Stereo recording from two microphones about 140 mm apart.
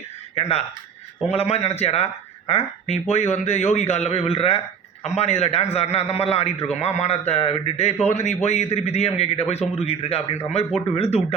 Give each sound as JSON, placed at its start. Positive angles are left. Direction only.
{"t": 0.3, "sound": "a man's voice", "side_deg": 45}